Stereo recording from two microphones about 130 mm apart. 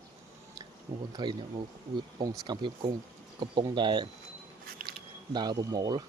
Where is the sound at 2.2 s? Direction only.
35° right (ahead or behind).